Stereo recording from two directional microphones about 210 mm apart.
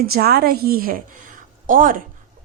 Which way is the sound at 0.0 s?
45° right (ahead or behind).